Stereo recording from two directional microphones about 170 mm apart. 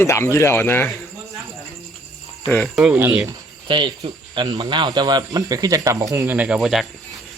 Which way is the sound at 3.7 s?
30° right (ahead or behind).